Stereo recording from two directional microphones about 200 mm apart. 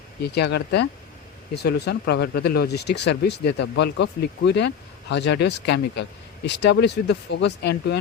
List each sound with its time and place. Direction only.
0.2 s speech: 55° left (ahead or behind)